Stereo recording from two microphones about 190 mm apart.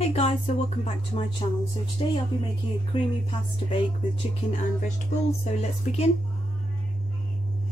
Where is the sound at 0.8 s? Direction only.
35° left (ahead or behind).